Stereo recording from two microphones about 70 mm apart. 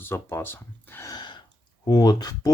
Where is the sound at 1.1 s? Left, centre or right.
Left.